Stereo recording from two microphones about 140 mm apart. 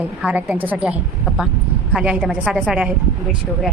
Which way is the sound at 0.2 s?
10° right (ahead or behind).